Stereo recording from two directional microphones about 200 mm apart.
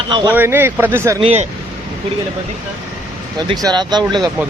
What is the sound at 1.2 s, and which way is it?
Speech, 30° right (ahead or behind).